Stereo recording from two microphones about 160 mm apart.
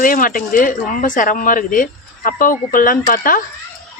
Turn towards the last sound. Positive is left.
turn(degrees=60)  # may be behind; listen again after turning